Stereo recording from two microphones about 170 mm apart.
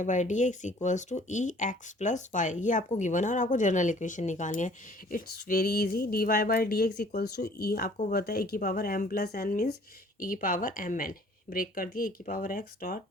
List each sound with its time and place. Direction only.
0.0 s speech: 45° left (ahead or behind)
5.1 s speech: 65° left (ahead or behind)
7.9 s speech: 50° left (ahead or behind)
8.2 s speech: 65° left (ahead or behind)
10.2 s speech: 55° left (ahead or behind)